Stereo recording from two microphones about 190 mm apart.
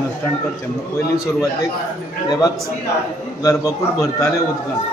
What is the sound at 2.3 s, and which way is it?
A man's voice, 20° left (ahead or behind).